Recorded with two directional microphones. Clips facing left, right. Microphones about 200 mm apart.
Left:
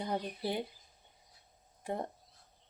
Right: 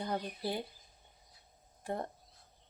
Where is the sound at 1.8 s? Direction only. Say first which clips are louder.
Left 1 dB; 15° left (ahead or behind).